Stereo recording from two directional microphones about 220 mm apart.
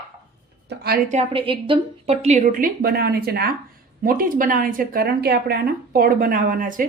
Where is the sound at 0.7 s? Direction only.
45° right (ahead or behind).